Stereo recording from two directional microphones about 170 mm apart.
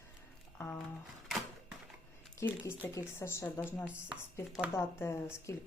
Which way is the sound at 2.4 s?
15° left (ahead or behind).